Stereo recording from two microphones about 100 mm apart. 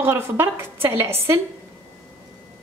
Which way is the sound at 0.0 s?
25° right (ahead or behind).